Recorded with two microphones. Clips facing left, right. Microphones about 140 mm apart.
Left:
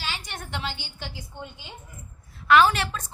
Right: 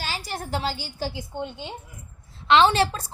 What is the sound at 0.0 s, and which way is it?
A woman's voice, 35° right (ahead or behind).